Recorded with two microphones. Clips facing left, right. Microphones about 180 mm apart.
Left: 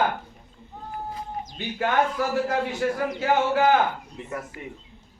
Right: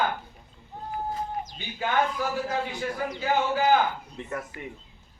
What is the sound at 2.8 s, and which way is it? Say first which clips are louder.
Speech: left 7 dB; 65° left (ahead or behind).